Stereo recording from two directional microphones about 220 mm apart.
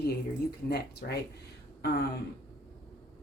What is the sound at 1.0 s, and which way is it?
Speech, 45° left (ahead or behind).